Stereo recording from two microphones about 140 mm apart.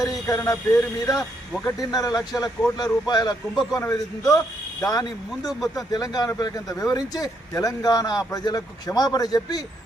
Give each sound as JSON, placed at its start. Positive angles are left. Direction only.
{"t": 0.0, "sound": "speech", "side_deg": 25}